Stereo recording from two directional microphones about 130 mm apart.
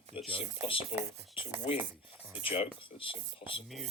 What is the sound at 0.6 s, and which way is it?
Speech, 45° left (ahead or behind).